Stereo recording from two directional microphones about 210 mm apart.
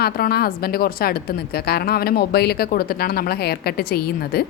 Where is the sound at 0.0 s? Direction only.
45° left (ahead or behind).